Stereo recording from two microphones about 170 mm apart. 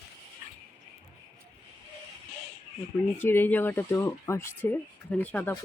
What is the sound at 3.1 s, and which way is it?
Speech, 15° left (ahead or behind).